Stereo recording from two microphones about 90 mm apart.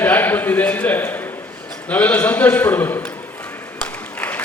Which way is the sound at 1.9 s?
15° left (ahead or behind).